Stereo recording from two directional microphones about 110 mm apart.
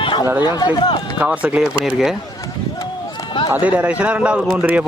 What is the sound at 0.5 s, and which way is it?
Speech, 40° left (ahead or behind).